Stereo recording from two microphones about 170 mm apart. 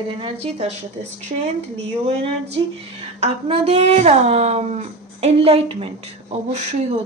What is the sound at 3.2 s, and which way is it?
A woman's voice, 35° right (ahead or behind).